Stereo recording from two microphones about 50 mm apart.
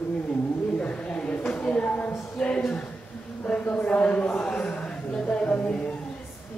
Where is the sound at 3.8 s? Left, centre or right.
Left.